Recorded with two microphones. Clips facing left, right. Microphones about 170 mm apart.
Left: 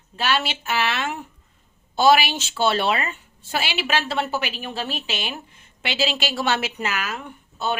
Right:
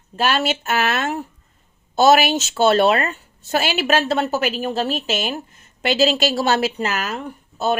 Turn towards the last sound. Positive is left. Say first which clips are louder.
# right 5 dB
turn(degrees=-40)  # may be behind; listen again after turning